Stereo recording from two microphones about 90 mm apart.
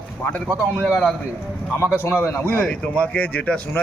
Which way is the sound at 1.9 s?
25° left (ahead or behind).